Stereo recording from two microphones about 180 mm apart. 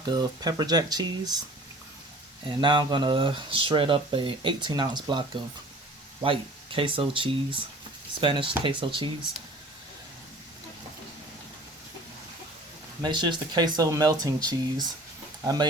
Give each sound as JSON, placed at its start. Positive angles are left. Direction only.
{"t": 0.0, "sound": "speech", "side_deg": -25}
{"t": 2.5, "sound": "speech", "side_deg": -25}
{"t": 13.0, "sound": "speech", "side_deg": -25}